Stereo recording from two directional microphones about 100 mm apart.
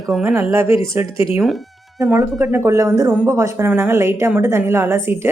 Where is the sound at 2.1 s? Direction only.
25° right (ahead or behind).